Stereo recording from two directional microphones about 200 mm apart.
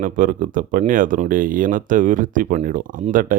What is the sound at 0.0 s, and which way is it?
Speech, 40° right (ahead or behind).